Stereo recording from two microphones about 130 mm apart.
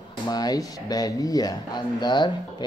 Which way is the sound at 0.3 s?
30° left (ahead or behind).